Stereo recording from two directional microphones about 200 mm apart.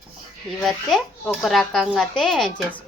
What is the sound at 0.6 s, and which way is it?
Speech, centre (ahead or behind).